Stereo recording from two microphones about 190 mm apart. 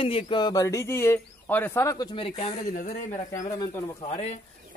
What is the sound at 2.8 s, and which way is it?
Speech, 50° left (ahead or behind).